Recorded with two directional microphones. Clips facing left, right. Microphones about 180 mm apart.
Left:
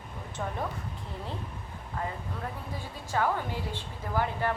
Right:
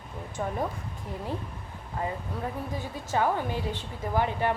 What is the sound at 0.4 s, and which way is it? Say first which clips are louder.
Speech: right 3 dB; 10° right (ahead or behind).